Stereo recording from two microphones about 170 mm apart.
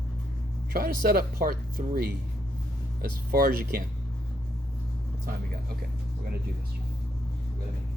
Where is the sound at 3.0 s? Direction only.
60° right (ahead or behind).